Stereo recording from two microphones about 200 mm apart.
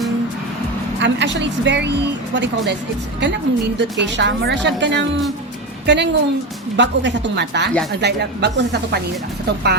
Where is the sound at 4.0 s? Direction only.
60° right (ahead or behind).